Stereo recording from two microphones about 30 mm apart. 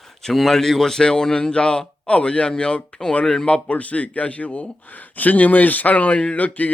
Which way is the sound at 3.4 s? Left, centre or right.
Left.